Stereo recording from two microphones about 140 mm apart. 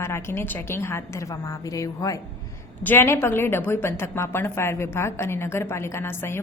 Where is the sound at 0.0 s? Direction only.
20° left (ahead or behind).